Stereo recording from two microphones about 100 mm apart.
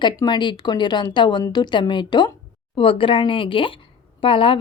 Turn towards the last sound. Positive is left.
turn(degrees=60)  # may be behind; listen again after turning